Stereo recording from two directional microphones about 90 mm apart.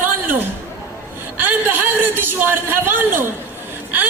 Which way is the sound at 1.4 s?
25° right (ahead or behind).